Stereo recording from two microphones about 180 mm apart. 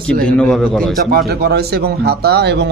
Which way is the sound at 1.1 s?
60° right (ahead or behind).